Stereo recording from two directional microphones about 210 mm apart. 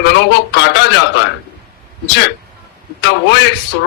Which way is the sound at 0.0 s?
55° left (ahead or behind).